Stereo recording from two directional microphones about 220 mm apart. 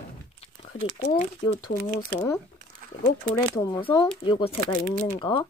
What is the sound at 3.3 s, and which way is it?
Speech, 15° left (ahead or behind).